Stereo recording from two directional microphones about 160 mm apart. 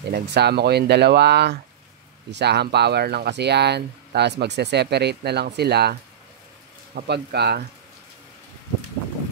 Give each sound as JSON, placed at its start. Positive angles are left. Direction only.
{"t": 0.1, "sound": "speech", "side_deg": -90}
{"t": 7.0, "sound": "speech", "side_deg": -90}